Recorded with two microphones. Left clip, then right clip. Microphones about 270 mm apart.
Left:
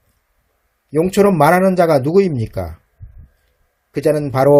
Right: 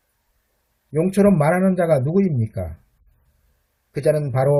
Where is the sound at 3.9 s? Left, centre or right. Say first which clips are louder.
Left 3 dB; left.